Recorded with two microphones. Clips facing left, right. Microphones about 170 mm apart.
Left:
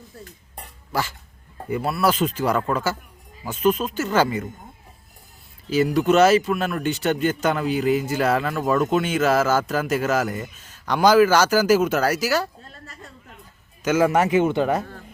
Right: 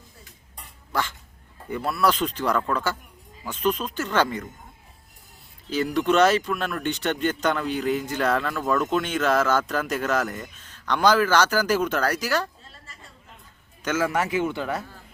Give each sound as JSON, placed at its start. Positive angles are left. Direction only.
{"t": 0.9, "sound": "speech", "side_deg": 5}
{"t": 5.6, "sound": "speech", "side_deg": 5}
{"t": 12.6, "sound": "a sound", "side_deg": 50}
{"t": 13.8, "sound": "a man's voice", "side_deg": 15}